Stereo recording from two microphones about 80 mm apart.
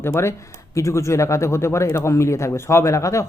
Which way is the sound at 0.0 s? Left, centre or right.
Left.